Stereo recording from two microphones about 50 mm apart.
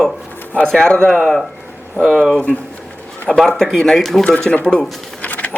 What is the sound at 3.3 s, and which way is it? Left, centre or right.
Speech, centre.